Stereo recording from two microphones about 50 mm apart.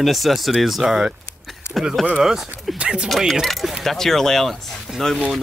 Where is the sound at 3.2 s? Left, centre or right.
Centre.